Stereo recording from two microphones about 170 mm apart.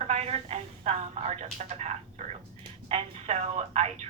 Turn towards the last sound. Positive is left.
turn(degrees=-40)  # may be behind; listen again after turning